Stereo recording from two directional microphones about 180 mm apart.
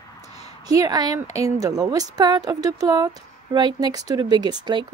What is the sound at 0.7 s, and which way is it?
A woman's voice, 20° right (ahead or behind).